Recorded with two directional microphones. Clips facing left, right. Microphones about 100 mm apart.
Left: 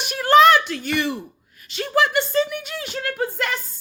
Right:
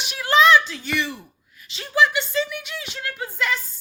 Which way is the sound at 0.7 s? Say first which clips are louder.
Left 3 dB; 55° left (ahead or behind).